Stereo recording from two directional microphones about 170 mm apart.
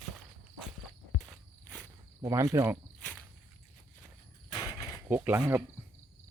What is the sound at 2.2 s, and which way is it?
Speech, 20° right (ahead or behind).